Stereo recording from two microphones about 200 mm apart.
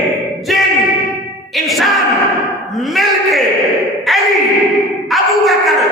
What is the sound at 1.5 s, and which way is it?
Bellow, centre (ahead or behind).